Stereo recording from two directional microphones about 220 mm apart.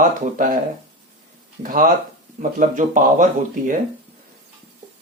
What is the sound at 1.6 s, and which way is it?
Speech, 40° right (ahead or behind).